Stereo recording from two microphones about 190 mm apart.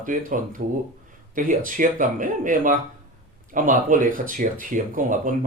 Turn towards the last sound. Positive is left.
turn(degrees=-45)  # may be behind; listen again after turning